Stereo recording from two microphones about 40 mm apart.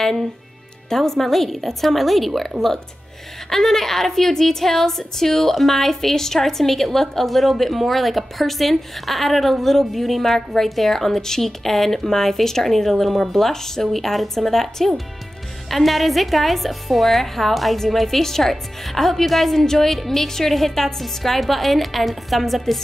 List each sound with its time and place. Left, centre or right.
0.8 s a woman's voice: centre